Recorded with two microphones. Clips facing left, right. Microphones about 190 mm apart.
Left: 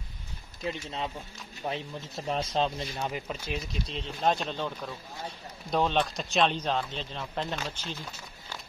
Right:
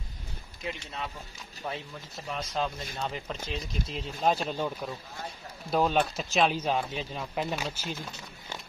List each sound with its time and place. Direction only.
0.7 s speech: 25° left (ahead or behind)
3.0 s speech: 10° left (ahead or behind)
3.8 s speech: 5° right (ahead or behind)